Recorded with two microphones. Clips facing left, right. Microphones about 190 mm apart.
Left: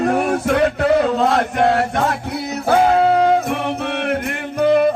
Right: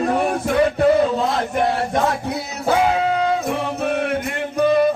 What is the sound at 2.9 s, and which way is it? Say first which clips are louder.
Music: left 5 dB; 45° left (ahead or behind).